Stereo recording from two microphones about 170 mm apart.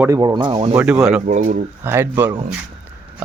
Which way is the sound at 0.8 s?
5° right (ahead or behind).